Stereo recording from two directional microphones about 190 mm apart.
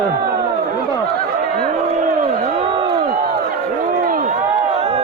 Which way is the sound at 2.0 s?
30° right (ahead or behind).